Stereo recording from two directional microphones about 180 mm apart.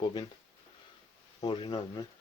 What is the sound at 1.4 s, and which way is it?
Speech, 25° left (ahead or behind).